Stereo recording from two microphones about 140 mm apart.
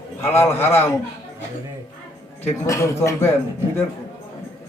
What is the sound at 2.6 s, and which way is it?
Speech, 20° left (ahead or behind).